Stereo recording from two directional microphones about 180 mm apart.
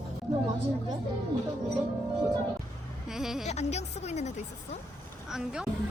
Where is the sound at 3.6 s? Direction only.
40° left (ahead or behind).